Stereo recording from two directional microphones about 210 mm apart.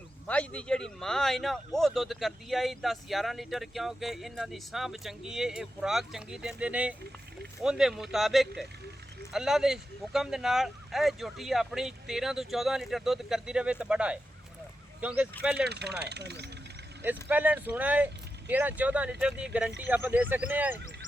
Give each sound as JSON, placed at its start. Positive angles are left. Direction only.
{"t": 0.3, "sound": "speech", "side_deg": 5}
{"t": 15.4, "sound": "speech", "side_deg": -5}
{"t": 15.6, "sound": "speech", "side_deg": -50}
{"t": 17.2, "sound": "speech", "side_deg": -10}